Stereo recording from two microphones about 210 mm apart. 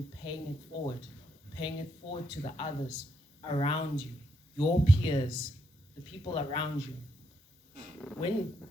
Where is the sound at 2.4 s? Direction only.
25° left (ahead or behind).